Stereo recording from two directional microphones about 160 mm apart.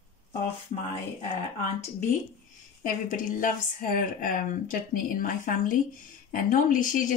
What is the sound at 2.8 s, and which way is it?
Speech, 55° left (ahead or behind).